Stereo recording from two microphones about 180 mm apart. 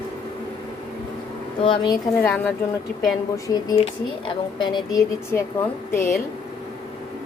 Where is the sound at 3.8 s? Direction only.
25° left (ahead or behind).